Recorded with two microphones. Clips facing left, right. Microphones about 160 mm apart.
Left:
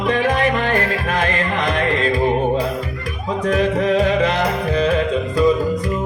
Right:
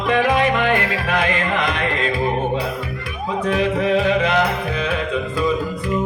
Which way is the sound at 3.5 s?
40° left (ahead or behind).